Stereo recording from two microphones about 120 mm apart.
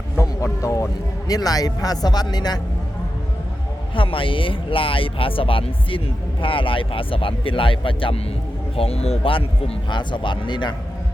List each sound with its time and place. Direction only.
0.2 s a sound: 25° left (ahead or behind)
1.3 s speech: 30° left (ahead or behind)
3.9 s speech: 45° left (ahead or behind)